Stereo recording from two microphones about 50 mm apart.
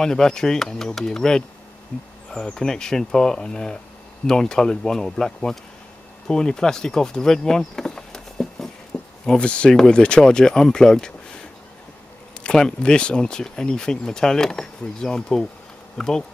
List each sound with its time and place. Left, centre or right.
0.0 s speech: centre
8.9 s a sound: centre
9.4 s speech: left
12.4 s speech: centre